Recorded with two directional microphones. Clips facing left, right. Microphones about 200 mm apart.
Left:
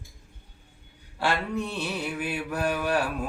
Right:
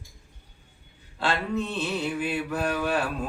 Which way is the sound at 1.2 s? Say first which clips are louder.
Even; 10° left (ahead or behind).